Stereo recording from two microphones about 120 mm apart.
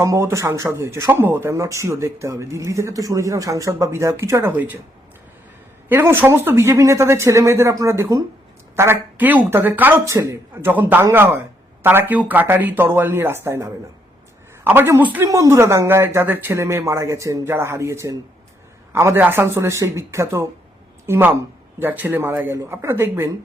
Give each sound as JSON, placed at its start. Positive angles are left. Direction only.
{"t": 0.0, "sound": "speech", "side_deg": -25}
{"t": 5.9, "sound": "speech", "side_deg": -20}